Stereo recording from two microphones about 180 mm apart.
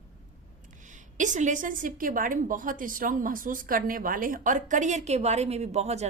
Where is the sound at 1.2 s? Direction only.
45° right (ahead or behind).